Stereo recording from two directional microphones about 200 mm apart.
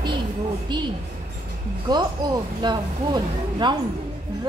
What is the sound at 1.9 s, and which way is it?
A woman's voice, 20° right (ahead or behind).